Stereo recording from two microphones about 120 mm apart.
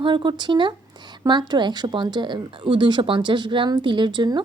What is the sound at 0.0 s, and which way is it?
A woman's voice, 45° right (ahead or behind).